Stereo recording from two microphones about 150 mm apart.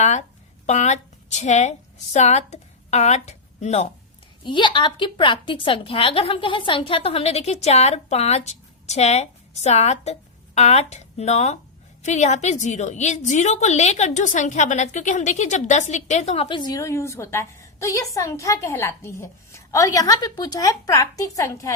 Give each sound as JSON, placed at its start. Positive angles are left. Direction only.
{"t": 0.0, "sound": "a sound", "side_deg": 50}
{"t": 2.1, "sound": "speech", "side_deg": 50}
{"t": 4.4, "sound": "a woman's voice", "side_deg": 30}